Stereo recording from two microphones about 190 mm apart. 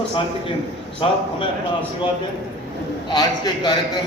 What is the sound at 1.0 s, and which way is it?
Speech, 30° left (ahead or behind).